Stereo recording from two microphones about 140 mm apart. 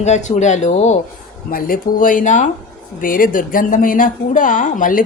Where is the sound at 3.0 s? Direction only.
85° left.